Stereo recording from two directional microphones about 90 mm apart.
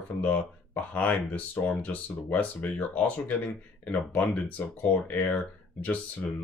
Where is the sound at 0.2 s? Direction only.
15° left (ahead or behind).